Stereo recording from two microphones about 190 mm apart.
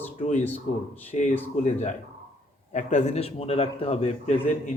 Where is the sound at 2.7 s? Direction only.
40° left (ahead or behind).